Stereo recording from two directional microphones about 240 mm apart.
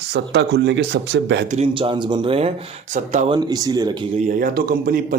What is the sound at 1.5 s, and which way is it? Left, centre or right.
Speech, right.